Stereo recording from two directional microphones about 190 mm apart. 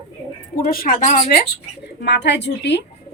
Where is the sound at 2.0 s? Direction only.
65° left (ahead or behind).